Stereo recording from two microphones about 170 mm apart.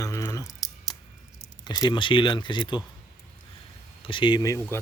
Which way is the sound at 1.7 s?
25° left (ahead or behind).